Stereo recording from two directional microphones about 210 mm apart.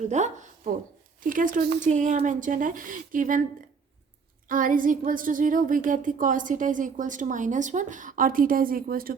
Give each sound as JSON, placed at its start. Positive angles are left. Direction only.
{"t": 0.1, "sound": "a woman's voice", "side_deg": -35}
{"t": 4.4, "sound": "a woman's voice", "side_deg": -40}